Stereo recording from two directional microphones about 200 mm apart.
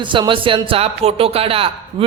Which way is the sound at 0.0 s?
25° right (ahead or behind).